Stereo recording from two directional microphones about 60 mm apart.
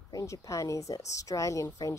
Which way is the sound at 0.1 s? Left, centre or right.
Left.